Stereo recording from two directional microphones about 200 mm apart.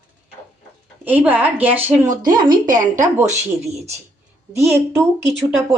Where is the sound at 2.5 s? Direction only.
40° right (ahead or behind).